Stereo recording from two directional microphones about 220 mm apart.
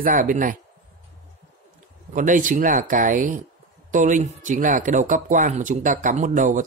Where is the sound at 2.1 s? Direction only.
35° right (ahead or behind).